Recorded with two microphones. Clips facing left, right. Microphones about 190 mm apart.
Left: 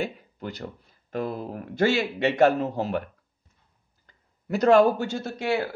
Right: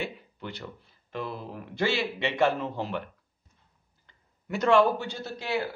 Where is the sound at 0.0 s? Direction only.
40° left (ahead or behind).